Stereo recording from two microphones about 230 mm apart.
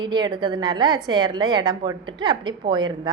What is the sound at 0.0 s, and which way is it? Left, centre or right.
A woman's voice, centre.